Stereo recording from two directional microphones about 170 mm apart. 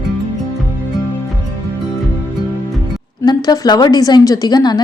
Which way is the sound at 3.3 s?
25° left (ahead or behind).